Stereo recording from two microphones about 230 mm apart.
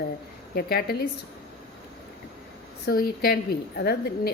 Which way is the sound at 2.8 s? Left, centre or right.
Left.